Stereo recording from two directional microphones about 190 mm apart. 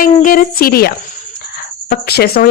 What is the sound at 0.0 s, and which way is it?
Speech, 45° left (ahead or behind).